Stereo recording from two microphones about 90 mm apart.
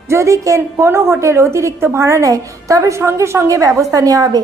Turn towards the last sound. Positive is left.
turn(degrees=-40)  # may be behind; listen again after turning